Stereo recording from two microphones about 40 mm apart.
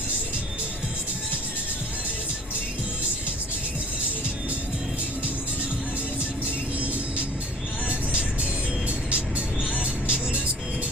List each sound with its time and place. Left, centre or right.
7.9 s music: right
9.6 s vehicle: right